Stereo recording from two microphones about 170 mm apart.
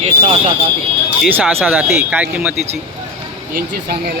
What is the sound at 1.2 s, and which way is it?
Speech, 10° right (ahead or behind).